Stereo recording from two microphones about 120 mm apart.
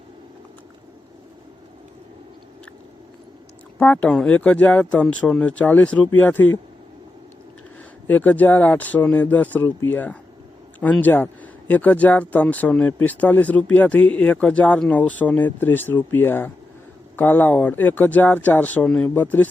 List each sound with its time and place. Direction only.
3.8 s speech: 10° left (ahead or behind)
8.0 s speech: 15° left (ahead or behind)